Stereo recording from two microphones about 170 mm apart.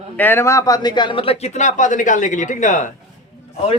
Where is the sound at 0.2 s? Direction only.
15° left (ahead or behind); by 2.9 s 45° left (ahead or behind).